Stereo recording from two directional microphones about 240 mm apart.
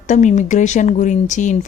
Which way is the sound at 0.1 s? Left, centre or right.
Left.